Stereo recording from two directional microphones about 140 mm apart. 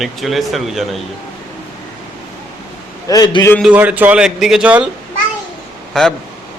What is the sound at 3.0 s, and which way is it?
Speech, 25° left (ahead or behind).